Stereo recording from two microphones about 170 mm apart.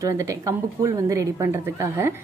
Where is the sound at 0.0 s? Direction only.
20° right (ahead or behind).